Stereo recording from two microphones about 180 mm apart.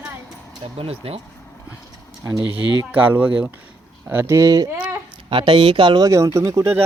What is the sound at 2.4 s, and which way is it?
Speech, 25° left (ahead or behind).